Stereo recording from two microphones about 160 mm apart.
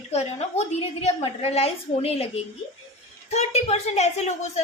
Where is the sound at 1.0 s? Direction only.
40° left (ahead or behind).